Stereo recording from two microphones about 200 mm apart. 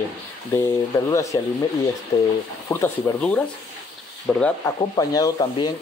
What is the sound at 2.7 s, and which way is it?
Speech, 10° left (ahead or behind).